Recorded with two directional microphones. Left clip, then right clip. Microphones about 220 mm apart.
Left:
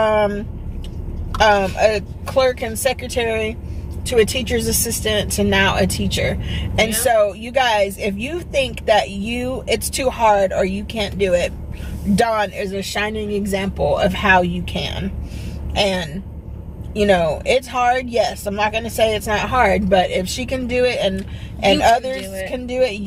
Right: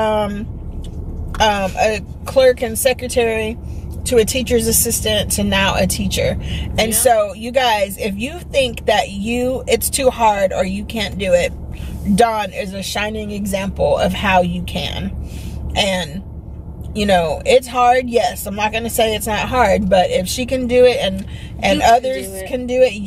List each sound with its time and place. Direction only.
0.0 s vehicle: 20° right (ahead or behind)
1.4 s a woman's voice: 20° right (ahead or behind)
22.4 s a woman's voice: 20° right (ahead or behind)